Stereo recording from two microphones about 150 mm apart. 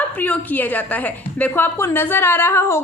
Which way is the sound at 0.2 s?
10° left (ahead or behind).